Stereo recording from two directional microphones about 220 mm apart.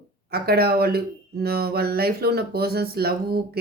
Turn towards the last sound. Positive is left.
turn(degrees=-45)  # may be behind; listen again after turning